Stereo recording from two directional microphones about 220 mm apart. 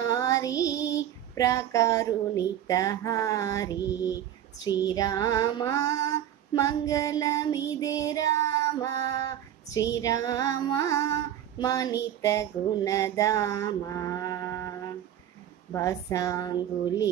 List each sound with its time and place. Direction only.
0.0 s female singing: 15° left (ahead or behind)
15.7 s female singing: 15° left (ahead or behind)